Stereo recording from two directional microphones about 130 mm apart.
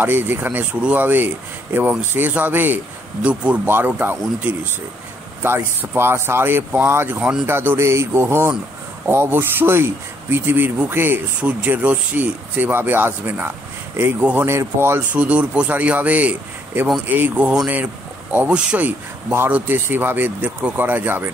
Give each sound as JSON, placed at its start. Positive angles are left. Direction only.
{"t": 0.0, "sound": "speech", "side_deg": -15}